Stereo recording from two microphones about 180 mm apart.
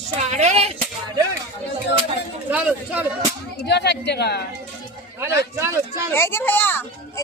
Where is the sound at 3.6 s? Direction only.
70° left (ahead or behind).